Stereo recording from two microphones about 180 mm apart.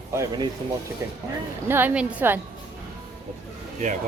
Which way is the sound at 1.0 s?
15° right (ahead or behind).